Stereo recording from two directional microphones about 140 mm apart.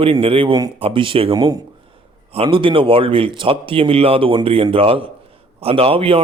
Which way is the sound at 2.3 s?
40° right (ahead or behind).